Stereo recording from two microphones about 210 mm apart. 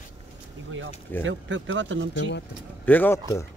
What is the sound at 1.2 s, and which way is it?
Speech, 65° right (ahead or behind).